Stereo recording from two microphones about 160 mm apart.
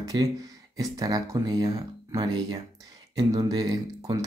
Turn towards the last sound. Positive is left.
turn(degrees=-25)  # may be behind; listen again after turning